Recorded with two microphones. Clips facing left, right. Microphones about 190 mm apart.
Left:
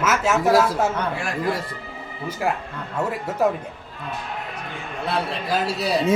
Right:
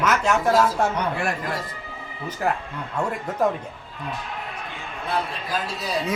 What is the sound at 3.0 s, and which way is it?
Speech, 5° left (ahead or behind).